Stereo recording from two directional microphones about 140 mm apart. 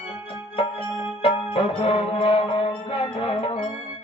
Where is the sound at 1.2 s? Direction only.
40° left (ahead or behind).